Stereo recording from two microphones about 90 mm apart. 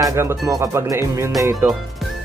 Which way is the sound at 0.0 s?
35° right (ahead or behind).